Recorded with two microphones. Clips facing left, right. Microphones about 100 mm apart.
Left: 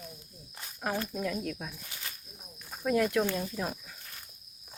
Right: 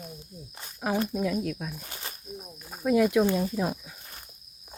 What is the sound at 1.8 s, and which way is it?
Speech, 40° right (ahead or behind).